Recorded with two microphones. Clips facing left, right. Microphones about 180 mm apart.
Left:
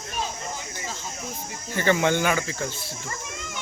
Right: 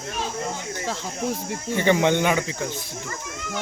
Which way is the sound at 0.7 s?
70° right (ahead or behind).